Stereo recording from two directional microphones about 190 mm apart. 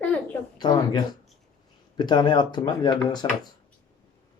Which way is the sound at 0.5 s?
20° left (ahead or behind).